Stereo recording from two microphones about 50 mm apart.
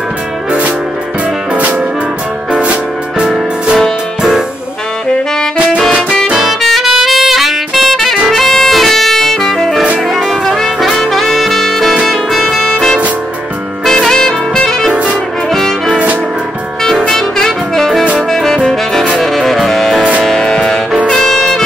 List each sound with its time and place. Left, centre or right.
0.5 s music: right
2.5 s music: right
6.3 s music: centre
10.0 s brass instrument: centre
12.1 s music: centre
17.1 s music: centre
18.3 s saxophone: centre
19.1 s music: centre